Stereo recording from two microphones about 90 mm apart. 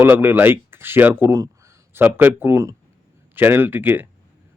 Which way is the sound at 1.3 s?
40° right (ahead or behind).